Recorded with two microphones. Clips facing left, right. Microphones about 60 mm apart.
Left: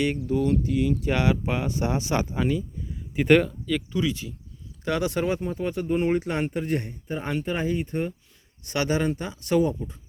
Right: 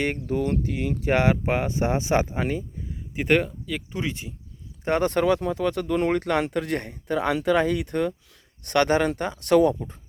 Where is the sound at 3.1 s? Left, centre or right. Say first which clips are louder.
Left 3 dB; centre.